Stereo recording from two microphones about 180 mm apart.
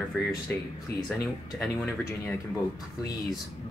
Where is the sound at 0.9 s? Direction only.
65° left (ahead or behind).